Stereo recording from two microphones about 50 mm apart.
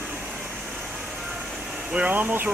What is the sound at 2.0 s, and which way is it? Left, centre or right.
Speech, right.